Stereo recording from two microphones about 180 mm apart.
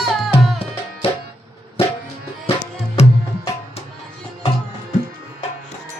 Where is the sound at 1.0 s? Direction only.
30° left (ahead or behind).